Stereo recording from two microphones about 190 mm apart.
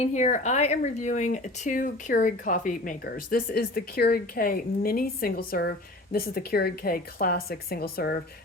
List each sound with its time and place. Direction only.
0.0 s speech: 40° left (ahead or behind); by 8.2 s 55° left (ahead or behind)